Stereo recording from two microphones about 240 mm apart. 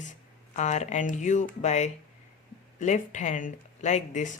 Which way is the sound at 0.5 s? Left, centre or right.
Left.